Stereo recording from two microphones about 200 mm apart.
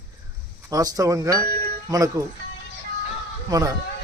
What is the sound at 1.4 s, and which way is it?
Speech, 45° right (ahead or behind).